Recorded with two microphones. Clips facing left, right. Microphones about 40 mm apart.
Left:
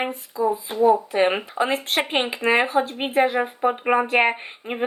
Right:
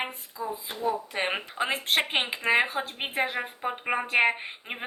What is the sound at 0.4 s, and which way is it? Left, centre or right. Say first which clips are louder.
Speech: left 12 dB; left.